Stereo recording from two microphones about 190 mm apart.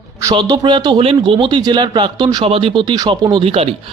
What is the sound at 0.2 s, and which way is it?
Speech, 15° right (ahead or behind).